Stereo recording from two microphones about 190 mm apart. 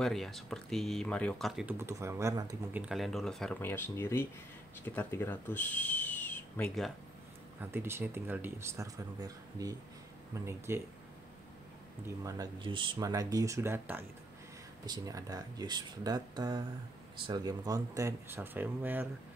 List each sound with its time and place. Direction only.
0.0 s speech: centre (ahead or behind)
1.8 s speech: 15° right (ahead or behind)
2.8 s speech: centre (ahead or behind)
7.6 s speech: 10° right (ahead or behind)
12.2 s speech: 20° right (ahead or behind)